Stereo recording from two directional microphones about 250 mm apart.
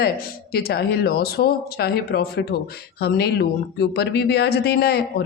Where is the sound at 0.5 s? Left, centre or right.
Left.